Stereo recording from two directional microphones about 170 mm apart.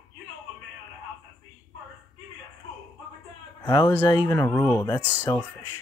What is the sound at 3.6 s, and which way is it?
Speech, 25° left (ahead or behind).